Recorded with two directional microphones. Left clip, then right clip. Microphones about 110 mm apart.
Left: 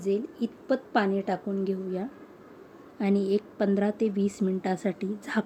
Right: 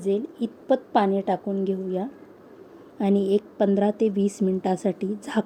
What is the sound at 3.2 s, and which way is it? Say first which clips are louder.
A woman's voice: right 5 dB; 40° right (ahead or behind).